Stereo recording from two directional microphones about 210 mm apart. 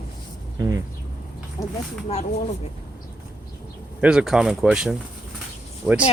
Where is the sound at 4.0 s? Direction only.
5° right (ahead or behind).